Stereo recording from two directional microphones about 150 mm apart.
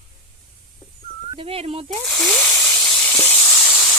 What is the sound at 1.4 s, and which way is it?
Speech, 40° right (ahead or behind).